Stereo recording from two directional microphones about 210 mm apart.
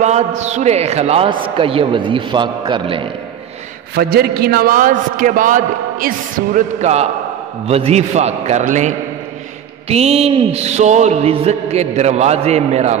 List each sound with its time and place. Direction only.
0.0 s a man's voice: 35° right (ahead or behind)
3.9 s a man's voice: 50° right (ahead or behind); by 12.9 s 30° right (ahead or behind)